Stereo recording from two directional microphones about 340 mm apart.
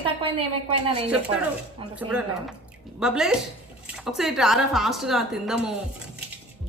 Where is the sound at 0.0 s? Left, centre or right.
Centre.